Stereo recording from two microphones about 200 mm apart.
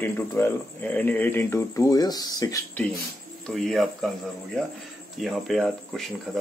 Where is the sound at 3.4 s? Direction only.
Centre (ahead or behind).